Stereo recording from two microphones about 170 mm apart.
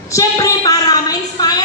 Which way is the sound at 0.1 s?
20° left (ahead or behind).